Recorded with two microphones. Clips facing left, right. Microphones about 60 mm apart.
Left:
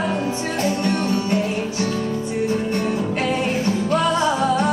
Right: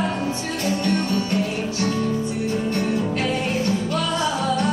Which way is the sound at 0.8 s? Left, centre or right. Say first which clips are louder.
Left 1 dB; left.